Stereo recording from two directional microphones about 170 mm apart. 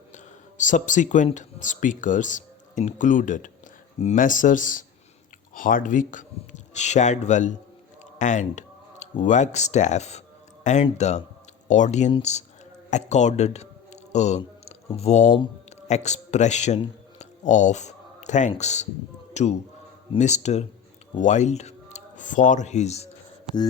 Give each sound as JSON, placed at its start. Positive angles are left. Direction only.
{"t": 0.5, "sound": "speech", "side_deg": 45}
{"t": 8.2, "sound": "a sound", "side_deg": 45}
{"t": 9.2, "sound": "a man's voice", "side_deg": 45}